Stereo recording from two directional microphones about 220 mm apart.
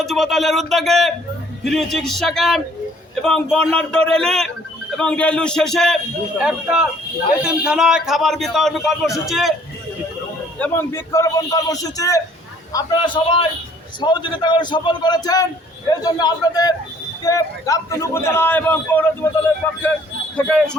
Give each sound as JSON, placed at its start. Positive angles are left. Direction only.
{"t": 0.0, "sound": "a man's voice", "side_deg": 0}
{"t": 10.6, "sound": "a man's voice", "side_deg": 10}